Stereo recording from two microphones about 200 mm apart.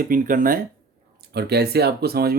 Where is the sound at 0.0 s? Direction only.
45° right (ahead or behind).